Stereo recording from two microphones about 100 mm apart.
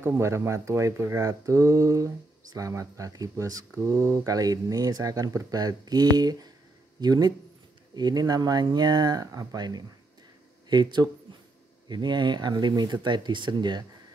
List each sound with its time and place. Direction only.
0.1 s speech: 30° right (ahead or behind); by 13.8 s 45° right (ahead or behind)